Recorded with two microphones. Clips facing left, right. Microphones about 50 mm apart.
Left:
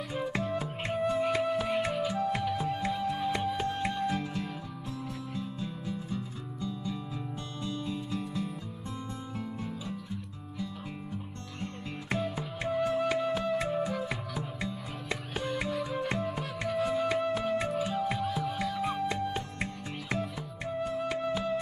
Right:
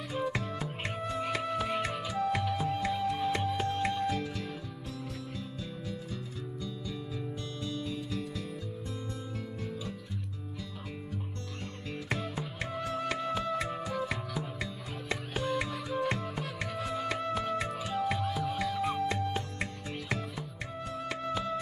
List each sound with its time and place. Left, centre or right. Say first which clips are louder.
0.3 s music: left 3 dB; centre
11.6 s music: left 3 dB; centre